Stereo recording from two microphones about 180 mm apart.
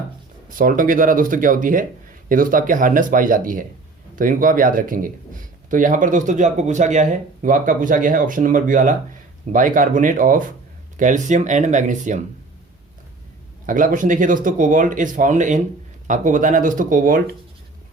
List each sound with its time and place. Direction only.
0.4 s speech: 50° right (ahead or behind)
13.7 s speech: 45° right (ahead or behind)